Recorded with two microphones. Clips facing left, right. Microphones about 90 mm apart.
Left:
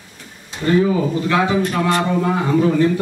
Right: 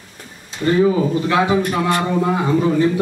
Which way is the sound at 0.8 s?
15° right (ahead or behind).